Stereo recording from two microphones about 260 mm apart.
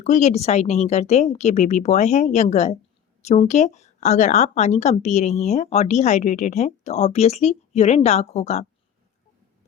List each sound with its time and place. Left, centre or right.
0.0 s a woman's voice: left